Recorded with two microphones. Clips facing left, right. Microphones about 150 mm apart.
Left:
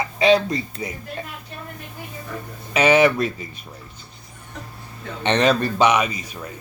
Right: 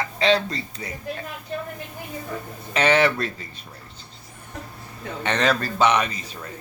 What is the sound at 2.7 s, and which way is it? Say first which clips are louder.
Speech: left 4 dB; 10° left (ahead or behind).